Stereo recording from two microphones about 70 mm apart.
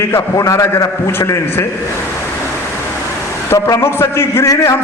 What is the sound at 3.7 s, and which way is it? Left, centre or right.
Speech, left.